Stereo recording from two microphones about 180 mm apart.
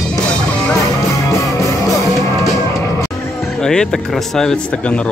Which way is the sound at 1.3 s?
20° left (ahead or behind).